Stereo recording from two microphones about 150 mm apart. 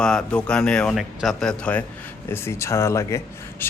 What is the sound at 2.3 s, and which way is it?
A man's voice, 15° left (ahead or behind).